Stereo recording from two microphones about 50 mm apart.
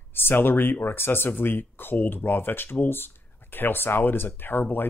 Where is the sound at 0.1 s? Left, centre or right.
Left.